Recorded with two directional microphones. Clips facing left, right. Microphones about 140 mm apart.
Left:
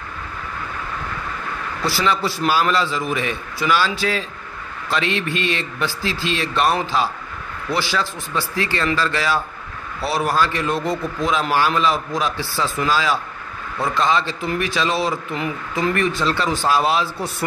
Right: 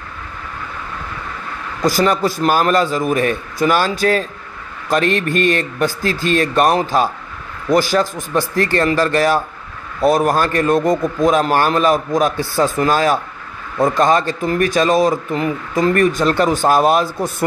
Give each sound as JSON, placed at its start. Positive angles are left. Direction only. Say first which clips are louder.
{"t": 1.8, "sound": "a man's voice", "louder": "right 6 dB", "side_deg": -45}